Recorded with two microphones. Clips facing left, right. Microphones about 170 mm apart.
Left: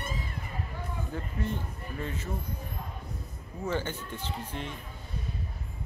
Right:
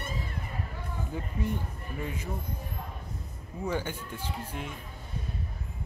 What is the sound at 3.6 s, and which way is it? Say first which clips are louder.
Speech: even; 10° right (ahead or behind).